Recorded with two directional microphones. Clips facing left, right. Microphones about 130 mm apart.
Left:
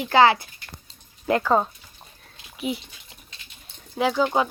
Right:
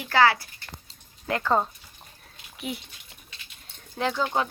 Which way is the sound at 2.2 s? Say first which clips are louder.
Left 6 dB; centre (ahead or behind).